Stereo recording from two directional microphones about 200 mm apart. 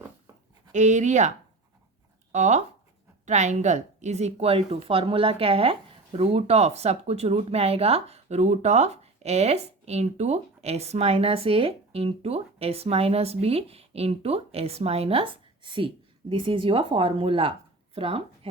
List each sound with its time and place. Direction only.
0.7 s a woman's voice: 35° right (ahead or behind)
2.3 s a woman's voice: 35° right (ahead or behind)